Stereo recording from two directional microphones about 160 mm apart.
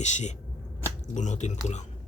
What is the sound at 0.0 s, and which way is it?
Speech, 45° left (ahead or behind).